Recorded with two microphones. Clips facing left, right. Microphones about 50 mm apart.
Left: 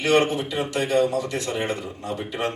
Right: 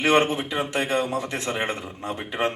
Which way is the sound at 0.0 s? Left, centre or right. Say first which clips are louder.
Even; right.